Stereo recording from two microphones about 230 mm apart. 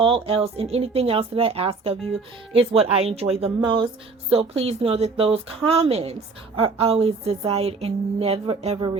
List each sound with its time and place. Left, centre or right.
0.0 s speech: right